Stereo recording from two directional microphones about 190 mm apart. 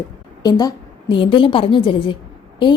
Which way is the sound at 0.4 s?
20° left (ahead or behind).